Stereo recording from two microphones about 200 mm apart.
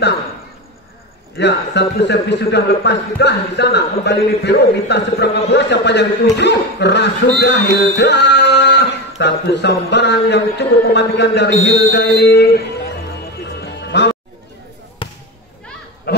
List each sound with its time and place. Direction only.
1.4 s speech: 60° left (ahead or behind)
13.6 s music: 60° left (ahead or behind)
15.0 s basketball bounce: 25° left (ahead or behind)
16.1 s goose: 50° left (ahead or behind)